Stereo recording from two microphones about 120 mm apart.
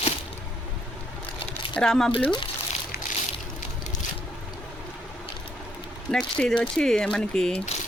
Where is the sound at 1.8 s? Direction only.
5° left (ahead or behind).